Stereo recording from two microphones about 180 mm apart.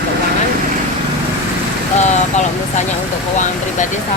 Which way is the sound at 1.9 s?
40° left (ahead or behind).